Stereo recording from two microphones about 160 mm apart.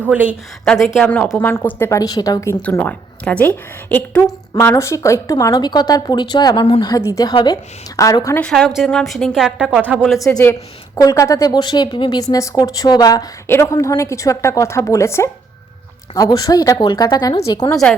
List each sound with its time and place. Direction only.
0.0 s a woman's voice: 10° right (ahead or behind)
0.6 s a woman's voice: 5° left (ahead or behind); by 8.4 s 20° left (ahead or behind)
8.4 s a woman's voice: centre (ahead or behind)
10.2 s speech: 20° left (ahead or behind)